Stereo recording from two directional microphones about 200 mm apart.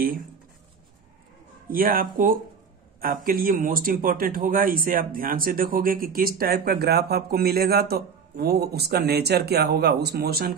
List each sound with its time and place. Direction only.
1.7 s speech: 45° right (ahead or behind)